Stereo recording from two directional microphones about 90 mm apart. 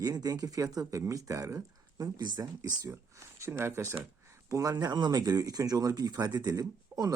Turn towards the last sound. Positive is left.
turn(degrees=-45)  # may be behind; listen again after turning